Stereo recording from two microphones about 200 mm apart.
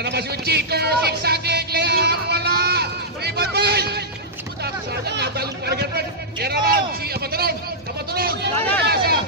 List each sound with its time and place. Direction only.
0.0 s a sound: 55° right (ahead or behind)
5.1 s a man's voice: 55° right (ahead or behind)
8.5 s speech: 5° left (ahead or behind)
8.8 s chatter: 50° right (ahead or behind)